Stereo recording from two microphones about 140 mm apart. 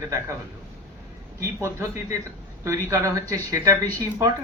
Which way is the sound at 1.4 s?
20° right (ahead or behind).